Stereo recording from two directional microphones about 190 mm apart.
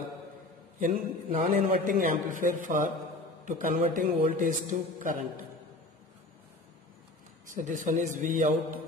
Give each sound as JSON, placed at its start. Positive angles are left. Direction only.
{"t": 0.7, "sound": "a man's voice", "side_deg": -45}
{"t": 7.4, "sound": "a man's voice", "side_deg": -45}